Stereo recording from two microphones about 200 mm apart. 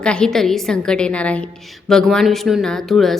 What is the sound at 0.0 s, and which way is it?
A woman's voice, 5° left (ahead or behind).